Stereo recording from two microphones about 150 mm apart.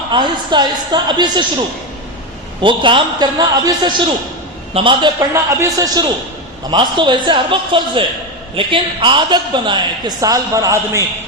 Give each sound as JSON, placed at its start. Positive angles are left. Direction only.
{"t": 0.1, "sound": "a woman's voice", "side_deg": -30}
{"t": 2.6, "sound": "a woman's voice", "side_deg": -35}
{"t": 5.3, "sound": "a woman's voice", "side_deg": -20}